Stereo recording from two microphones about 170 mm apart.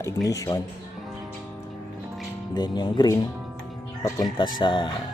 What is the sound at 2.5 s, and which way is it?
Speech, 25° left (ahead or behind).